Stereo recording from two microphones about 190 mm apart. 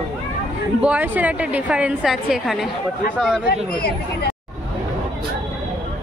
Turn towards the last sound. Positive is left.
turn(degrees=55)  # may be behind; listen again after turning